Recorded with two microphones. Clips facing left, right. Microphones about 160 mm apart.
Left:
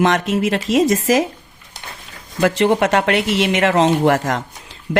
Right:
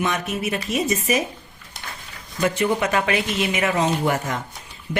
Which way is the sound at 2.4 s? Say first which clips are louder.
Left 6 dB; 90° left.